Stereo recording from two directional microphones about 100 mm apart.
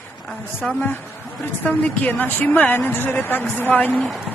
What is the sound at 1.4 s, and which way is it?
A woman's voice, 15° left (ahead or behind).